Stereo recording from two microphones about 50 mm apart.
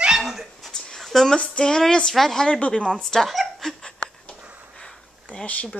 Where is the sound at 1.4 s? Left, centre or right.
Centre.